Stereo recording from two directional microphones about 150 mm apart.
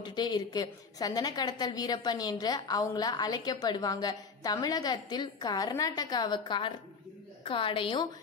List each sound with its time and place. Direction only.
0.0 s a woman's voice: 30° left (ahead or behind)